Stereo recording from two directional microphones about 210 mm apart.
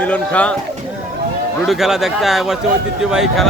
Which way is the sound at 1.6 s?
Centre (ahead or behind).